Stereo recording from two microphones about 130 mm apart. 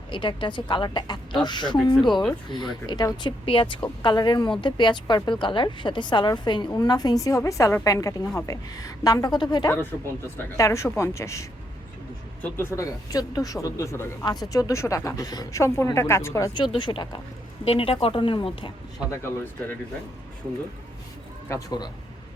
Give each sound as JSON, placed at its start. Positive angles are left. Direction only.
{"t": 0.1, "sound": "a woman's voice", "side_deg": 40}
{"t": 10.3, "sound": "speech", "side_deg": 20}
{"t": 16.7, "sound": "a woman's voice", "side_deg": 35}
{"t": 17.7, "sound": "a woman's voice", "side_deg": 45}
{"t": 19.1, "sound": "speech", "side_deg": 20}
{"t": 21.5, "sound": "a woman's voice", "side_deg": 30}